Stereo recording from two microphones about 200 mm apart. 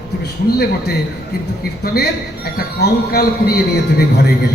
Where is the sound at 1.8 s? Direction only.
50° left (ahead or behind).